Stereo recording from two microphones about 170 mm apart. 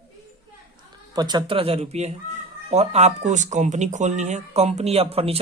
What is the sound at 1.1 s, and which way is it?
Speech, 25° right (ahead or behind).